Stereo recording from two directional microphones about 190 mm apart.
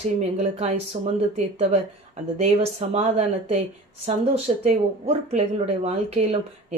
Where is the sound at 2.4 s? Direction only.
30° right (ahead or behind).